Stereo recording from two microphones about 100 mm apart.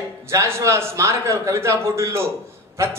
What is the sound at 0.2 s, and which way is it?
A man's voice, 25° right (ahead or behind).